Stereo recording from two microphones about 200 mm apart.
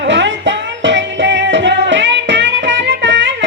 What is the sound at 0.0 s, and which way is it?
Music, 65° right (ahead or behind).